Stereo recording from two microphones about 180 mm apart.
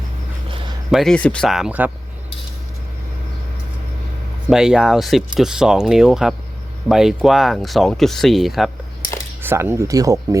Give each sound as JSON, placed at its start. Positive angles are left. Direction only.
{"t": 0.9, "sound": "speech", "side_deg": 0}
{"t": 4.4, "sound": "speech", "side_deg": -5}
{"t": 9.4, "sound": "speech", "side_deg": -10}